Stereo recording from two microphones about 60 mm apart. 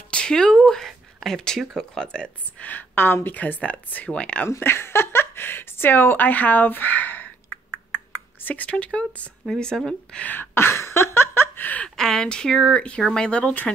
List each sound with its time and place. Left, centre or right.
0.1 s a sound: centre
0.7 s speech: centre
2.6 s a woman's voice: left
4.6 s a woman's voice: left; by 10.2 s centre
10.2 s a woman's voice: left
10.5 s a sound: left
12.0 s speech: centre